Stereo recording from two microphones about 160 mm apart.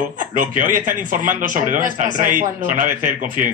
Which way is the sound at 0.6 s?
55° right (ahead or behind).